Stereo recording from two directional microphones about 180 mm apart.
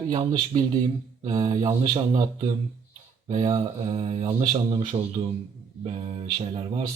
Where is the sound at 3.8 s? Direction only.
30° right (ahead or behind).